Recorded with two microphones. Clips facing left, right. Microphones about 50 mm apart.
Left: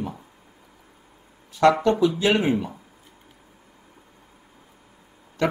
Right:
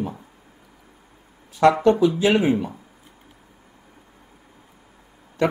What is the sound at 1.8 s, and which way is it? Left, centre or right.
Speech, centre.